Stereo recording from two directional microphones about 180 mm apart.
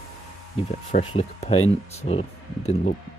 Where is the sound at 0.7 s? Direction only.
40° left (ahead or behind).